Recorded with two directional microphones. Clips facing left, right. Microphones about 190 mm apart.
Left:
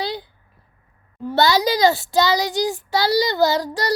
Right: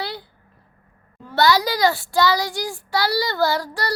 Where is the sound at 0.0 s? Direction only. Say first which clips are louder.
Left 4 dB; 20° left (ahead or behind).